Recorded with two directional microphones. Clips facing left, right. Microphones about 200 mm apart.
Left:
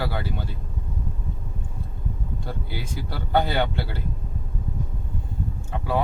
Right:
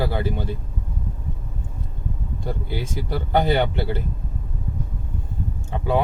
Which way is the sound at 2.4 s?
15° right (ahead or behind).